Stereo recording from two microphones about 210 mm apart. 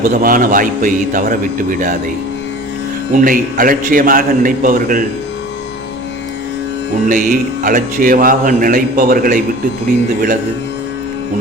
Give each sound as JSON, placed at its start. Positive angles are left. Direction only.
{"t": 0.0, "sound": "a man's voice", "side_deg": -40}
{"t": 3.1, "sound": "a man's voice", "side_deg": -40}
{"t": 7.1, "sound": "a man's voice", "side_deg": -40}